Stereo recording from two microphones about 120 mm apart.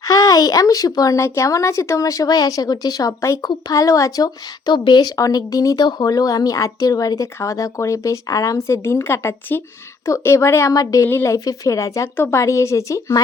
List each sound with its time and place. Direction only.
0.0 s speech: 30° left (ahead or behind)